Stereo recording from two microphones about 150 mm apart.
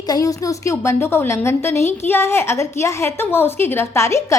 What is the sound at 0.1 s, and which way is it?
A woman's voice, 25° left (ahead or behind).